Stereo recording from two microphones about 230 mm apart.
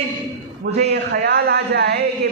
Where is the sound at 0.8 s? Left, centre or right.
Right.